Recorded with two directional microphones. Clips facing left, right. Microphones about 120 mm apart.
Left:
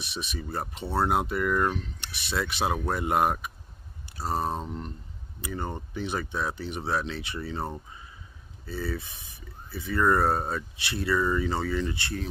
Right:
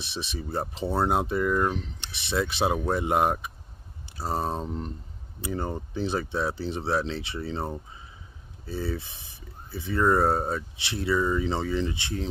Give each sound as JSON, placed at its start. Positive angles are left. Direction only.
{"t": 0.0, "sound": "speech", "side_deg": -25}
{"t": 4.5, "sound": "speech", "side_deg": 0}
{"t": 5.4, "sound": "speech", "side_deg": -30}
{"t": 8.6, "sound": "speech", "side_deg": -25}